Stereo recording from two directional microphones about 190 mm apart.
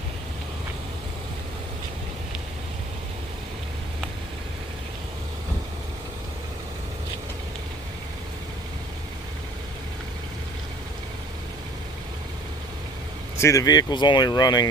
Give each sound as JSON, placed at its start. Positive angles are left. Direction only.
{"t": 13.4, "sound": "speech", "side_deg": 15}